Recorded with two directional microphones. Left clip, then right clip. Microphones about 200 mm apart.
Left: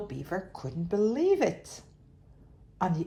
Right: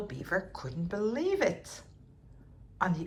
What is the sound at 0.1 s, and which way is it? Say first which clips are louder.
A woman's voice: right 2 dB; 15° left (ahead or behind).